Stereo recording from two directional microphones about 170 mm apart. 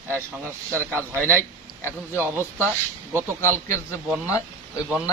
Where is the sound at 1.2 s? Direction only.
10° left (ahead or behind).